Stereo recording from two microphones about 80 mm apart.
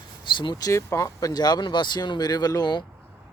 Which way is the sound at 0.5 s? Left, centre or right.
Left.